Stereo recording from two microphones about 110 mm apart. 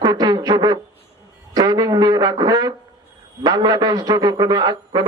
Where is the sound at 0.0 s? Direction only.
40° right (ahead or behind).